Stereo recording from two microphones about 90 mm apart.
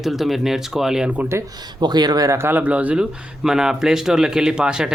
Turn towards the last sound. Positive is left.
turn(degrees=-10)  # may be behind; listen again after turning